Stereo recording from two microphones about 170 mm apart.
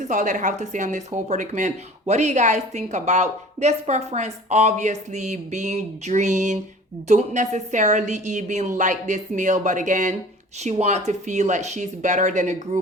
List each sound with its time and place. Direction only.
0.0 s speech: 45° right (ahead or behind)